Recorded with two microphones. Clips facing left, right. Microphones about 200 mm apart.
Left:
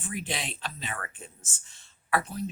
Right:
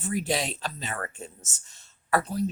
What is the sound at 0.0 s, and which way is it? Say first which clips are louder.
Speech: right 7 dB; 40° right (ahead or behind).